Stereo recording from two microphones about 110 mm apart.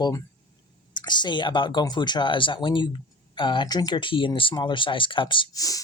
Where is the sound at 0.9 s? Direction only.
40° left (ahead or behind).